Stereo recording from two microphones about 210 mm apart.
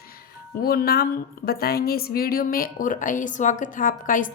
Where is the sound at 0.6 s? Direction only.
45° left (ahead or behind).